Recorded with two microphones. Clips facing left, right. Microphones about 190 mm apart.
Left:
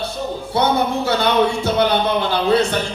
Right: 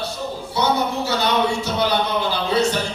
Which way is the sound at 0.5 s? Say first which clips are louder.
Left 3 dB; 55° left (ahead or behind).